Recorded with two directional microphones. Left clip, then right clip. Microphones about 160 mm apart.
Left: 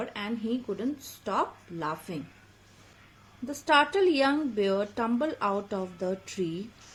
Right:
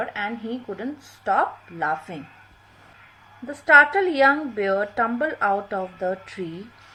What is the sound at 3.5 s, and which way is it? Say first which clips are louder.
A woman's voice: right 9 dB; 35° left (ahead or behind).